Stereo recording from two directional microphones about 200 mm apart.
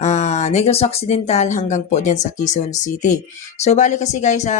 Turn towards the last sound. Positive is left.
turn(degrees=35)  # may be behind; listen again after turning